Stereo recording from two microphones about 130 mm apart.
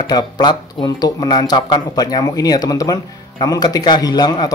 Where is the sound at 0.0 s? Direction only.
30° left (ahead or behind).